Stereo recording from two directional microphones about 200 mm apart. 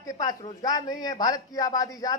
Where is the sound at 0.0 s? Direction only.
20° left (ahead or behind).